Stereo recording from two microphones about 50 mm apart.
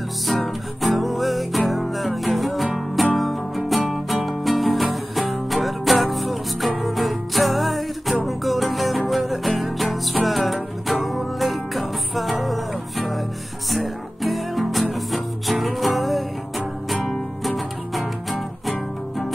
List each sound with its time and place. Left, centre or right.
0.3 s music: centre